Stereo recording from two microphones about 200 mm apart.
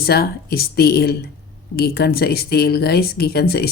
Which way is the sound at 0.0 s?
50° left (ahead or behind).